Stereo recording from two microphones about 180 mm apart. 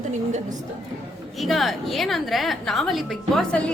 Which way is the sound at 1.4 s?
Centre (ahead or behind).